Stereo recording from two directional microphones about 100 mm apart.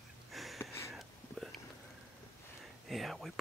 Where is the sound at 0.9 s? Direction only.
Centre (ahead or behind).